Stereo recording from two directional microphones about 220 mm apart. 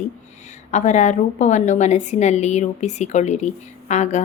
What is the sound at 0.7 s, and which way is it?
A woman's voice, 35° left (ahead or behind).